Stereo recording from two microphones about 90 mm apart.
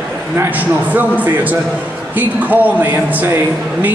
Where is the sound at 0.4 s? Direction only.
20° right (ahead or behind).